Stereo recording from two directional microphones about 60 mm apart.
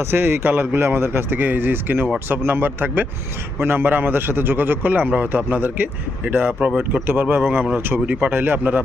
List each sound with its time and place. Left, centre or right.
0.1 s a man's voice: right